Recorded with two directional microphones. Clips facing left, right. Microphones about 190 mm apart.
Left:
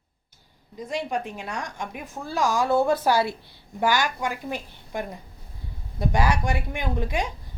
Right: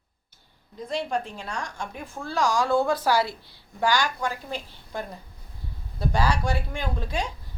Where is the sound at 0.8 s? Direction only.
15° left (ahead or behind).